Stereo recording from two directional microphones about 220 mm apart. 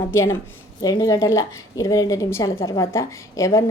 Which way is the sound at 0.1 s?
10° left (ahead or behind).